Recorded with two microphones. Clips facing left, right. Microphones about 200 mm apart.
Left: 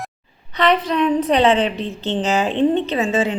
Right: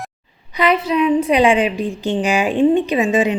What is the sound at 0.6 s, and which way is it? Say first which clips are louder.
A woman's voice: right 1 dB; 10° right (ahead or behind).